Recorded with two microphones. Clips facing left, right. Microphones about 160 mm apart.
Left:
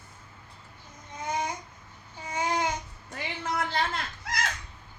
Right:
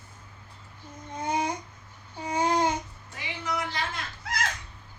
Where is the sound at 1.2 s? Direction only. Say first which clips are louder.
Right 3 dB; 30° right (ahead or behind).